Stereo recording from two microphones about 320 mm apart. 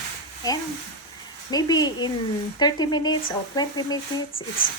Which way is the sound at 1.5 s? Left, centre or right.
Centre.